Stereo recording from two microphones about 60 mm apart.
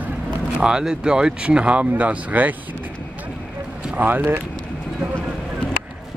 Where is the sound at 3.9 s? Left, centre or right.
Right.